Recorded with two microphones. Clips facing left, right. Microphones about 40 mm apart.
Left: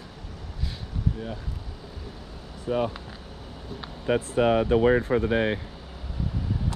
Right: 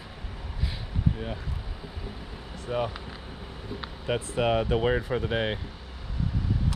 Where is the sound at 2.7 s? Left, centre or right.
Centre.